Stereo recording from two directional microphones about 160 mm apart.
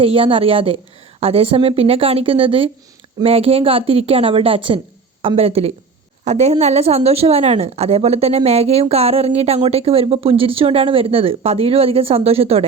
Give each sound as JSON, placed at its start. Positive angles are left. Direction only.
{"t": 0.0, "sound": "a woman's voice", "side_deg": -35}